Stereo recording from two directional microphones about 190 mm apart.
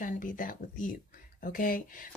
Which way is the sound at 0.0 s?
45° left (ahead or behind).